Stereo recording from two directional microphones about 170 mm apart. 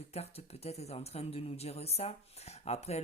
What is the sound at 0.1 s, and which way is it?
Speech, 35° left (ahead or behind).